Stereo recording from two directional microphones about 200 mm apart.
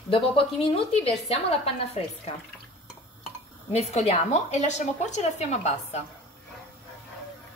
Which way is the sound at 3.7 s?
35° left (ahead or behind).